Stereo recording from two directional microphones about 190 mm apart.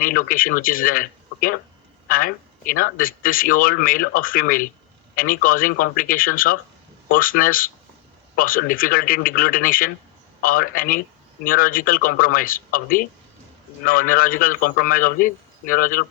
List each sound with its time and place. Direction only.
0.0 s speech: 45° left (ahead or behind)